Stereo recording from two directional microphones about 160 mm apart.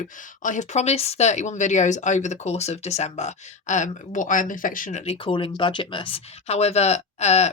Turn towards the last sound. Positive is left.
turn(degrees=45)  # may be behind; listen again after turning